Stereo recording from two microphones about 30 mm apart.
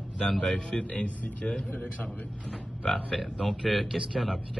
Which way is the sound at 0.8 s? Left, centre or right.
Left.